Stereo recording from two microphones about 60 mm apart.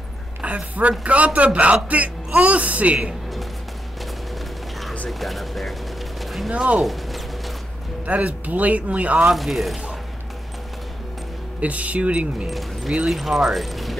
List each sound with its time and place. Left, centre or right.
0.4 s a man's voice: right
5.2 s speech: centre
6.2 s a sound: centre
8.1 s a man's voice: right
9.2 s speech: centre
11.6 s a man's voice: right
12.4 s speech: centre